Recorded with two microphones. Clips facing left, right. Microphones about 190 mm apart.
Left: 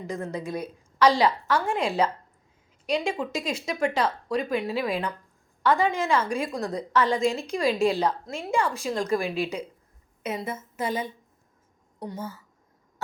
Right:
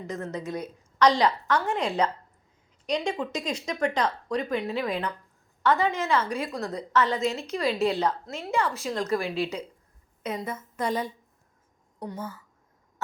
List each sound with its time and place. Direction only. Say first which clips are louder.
0.1 s a woman's voice: left 1 dB; 10° left (ahead or behind)
12.0 s a woman's voice: left 1 dB; 25° left (ahead or behind)